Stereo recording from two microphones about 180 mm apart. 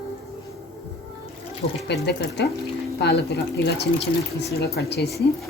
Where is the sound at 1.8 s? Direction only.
70° left (ahead or behind).